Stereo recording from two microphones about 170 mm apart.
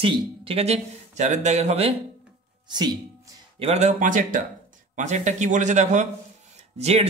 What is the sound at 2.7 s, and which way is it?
Speech, 25° right (ahead or behind).